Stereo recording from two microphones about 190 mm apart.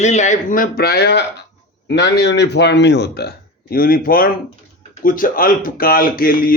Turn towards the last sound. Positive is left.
turn(degrees=50)  # may be behind; listen again after turning